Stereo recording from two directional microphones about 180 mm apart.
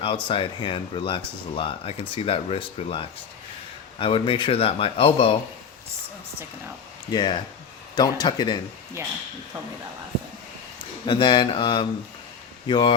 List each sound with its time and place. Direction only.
0.0 s speech: 30° left (ahead or behind)
7.1 s speech: 25° left (ahead or behind)
11.0 s speech: 25° left (ahead or behind)